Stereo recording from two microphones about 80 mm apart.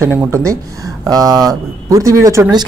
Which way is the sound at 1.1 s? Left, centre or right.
Right.